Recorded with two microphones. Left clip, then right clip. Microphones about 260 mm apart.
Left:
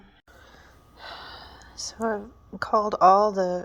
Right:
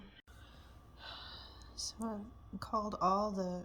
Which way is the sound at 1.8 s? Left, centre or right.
Centre.